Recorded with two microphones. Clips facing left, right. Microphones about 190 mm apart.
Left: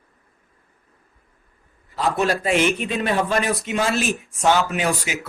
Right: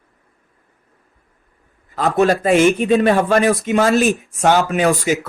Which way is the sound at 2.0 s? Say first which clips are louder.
Right 6 dB; 50° right (ahead or behind).